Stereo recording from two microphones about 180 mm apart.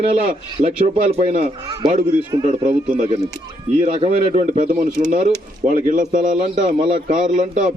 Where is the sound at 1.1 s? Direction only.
40° right (ahead or behind).